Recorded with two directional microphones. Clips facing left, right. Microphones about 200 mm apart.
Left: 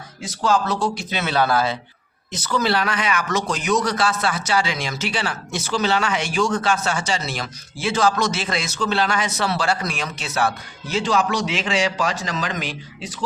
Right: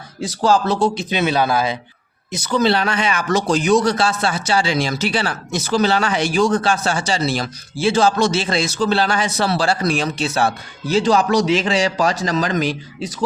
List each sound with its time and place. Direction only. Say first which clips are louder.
0.2 s a man's voice: right 4 dB; 35° right (ahead or behind)